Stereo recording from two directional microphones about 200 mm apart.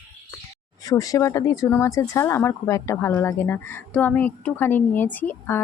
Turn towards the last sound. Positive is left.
turn(degrees=10)  # may be behind; listen again after turning